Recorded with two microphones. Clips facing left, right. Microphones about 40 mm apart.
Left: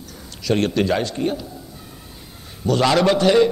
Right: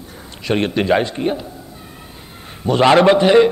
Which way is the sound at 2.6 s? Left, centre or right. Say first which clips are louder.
Right 5 dB; right.